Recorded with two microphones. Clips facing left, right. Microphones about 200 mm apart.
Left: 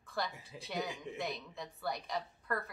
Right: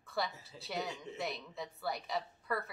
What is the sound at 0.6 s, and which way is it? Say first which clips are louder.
A woman's voice: even; centre (ahead or behind).